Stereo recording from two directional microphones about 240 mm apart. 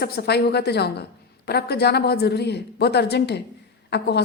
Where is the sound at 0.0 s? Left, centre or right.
Left.